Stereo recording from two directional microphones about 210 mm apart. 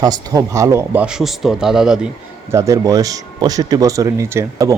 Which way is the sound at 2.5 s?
15° right (ahead or behind).